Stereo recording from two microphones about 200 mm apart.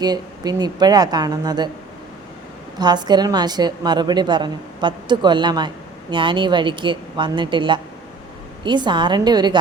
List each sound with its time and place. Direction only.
0.0 s a woman's voice: 20° right (ahead or behind)
2.7 s a woman's voice: 20° right (ahead or behind)